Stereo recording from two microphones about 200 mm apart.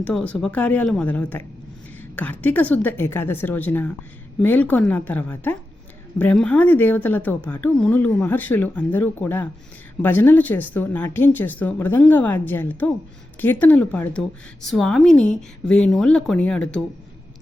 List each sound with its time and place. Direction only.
0.0 s a woman's voice: 5° left (ahead or behind)